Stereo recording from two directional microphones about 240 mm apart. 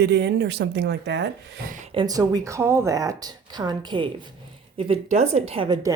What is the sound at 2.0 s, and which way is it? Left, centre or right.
A woman's voice, centre.